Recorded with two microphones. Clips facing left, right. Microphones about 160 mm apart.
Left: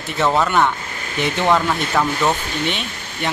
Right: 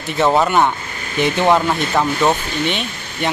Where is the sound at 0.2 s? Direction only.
15° right (ahead or behind).